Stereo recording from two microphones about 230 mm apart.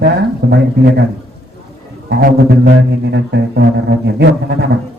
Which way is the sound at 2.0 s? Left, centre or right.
Right.